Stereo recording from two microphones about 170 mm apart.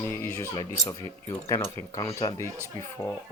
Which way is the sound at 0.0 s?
15° left (ahead or behind).